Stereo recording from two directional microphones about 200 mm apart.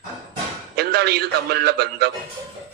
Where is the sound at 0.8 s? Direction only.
55° right (ahead or behind).